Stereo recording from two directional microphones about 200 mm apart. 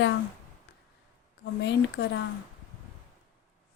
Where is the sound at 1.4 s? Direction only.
60° left (ahead or behind).